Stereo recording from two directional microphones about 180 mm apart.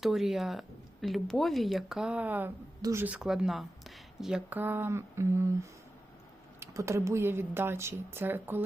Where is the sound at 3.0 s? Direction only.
5° right (ahead or behind).